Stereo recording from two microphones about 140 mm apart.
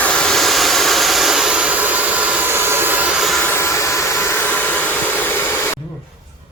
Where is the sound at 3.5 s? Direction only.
20° left (ahead or behind).